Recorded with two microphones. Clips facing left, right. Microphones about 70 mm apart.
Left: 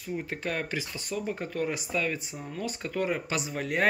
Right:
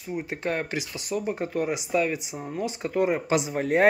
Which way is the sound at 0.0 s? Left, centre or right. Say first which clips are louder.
Right 3 dB; centre.